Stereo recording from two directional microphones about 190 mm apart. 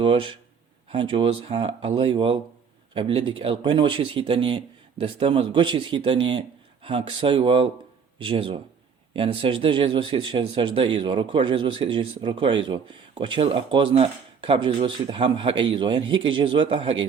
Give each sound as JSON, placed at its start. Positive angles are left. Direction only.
{"t": 0.0, "sound": "speech", "side_deg": -25}